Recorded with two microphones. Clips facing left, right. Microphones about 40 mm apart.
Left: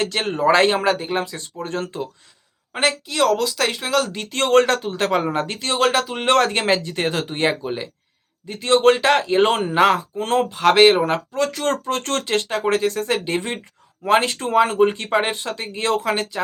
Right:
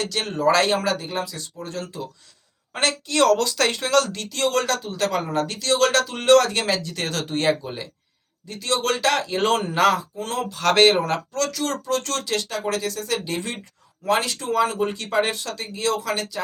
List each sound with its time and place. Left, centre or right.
0.0 s speech: left
2.7 s a woman's voice: centre
4.3 s speech: left; by 6.2 s centre
6.2 s speech: left
10.2 s speech: left
10.6 s speech: centre
11.5 s speech: left